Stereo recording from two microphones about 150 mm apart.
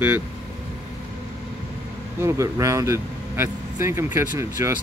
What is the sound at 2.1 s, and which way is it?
Speech, 20° right (ahead or behind).